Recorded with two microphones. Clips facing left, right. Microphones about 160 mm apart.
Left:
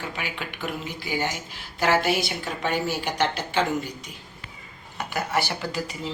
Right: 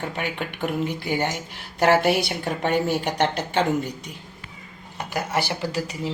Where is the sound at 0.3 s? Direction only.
55° right (ahead or behind).